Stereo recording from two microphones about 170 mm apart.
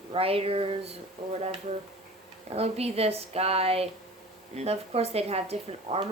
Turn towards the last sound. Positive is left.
turn(degrees=-35)  # may be behind; listen again after turning